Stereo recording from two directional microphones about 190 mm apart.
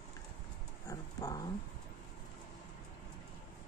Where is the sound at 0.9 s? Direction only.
20° left (ahead or behind).